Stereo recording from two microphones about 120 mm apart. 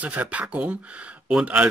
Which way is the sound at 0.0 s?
10° right (ahead or behind).